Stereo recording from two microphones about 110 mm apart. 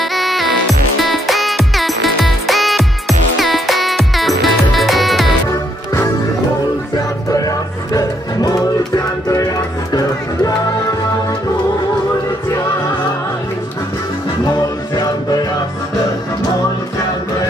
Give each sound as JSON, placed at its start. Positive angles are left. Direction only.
{"t": 0.0, "sound": "music", "side_deg": 0}
{"t": 7.2, "sound": "music", "side_deg": 30}